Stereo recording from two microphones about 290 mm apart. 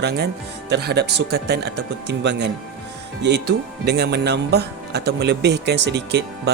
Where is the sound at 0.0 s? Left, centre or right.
Right.